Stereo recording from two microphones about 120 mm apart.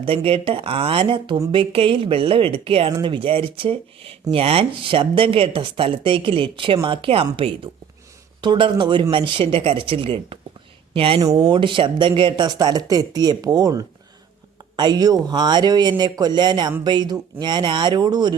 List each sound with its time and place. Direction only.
0.0 s speech: 50° right (ahead or behind)
11.2 s speech: 30° right (ahead or behind)